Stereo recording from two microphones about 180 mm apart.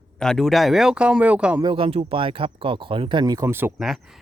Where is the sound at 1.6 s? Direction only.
30° right (ahead or behind); by 3.7 s 15° right (ahead or behind).